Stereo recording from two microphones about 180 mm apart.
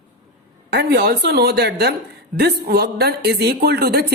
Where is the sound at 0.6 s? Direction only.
65° right (ahead or behind).